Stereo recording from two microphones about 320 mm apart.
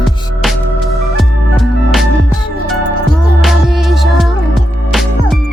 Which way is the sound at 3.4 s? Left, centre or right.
Centre.